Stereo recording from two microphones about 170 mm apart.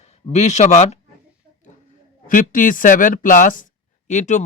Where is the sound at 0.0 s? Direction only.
40° left (ahead or behind).